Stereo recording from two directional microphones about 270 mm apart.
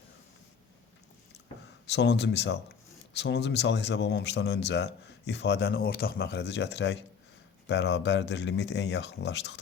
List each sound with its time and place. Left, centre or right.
1.9 s speech: left